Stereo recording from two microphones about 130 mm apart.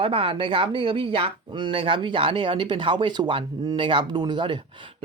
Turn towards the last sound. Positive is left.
turn(degrees=-40)  # may be behind; listen again after turning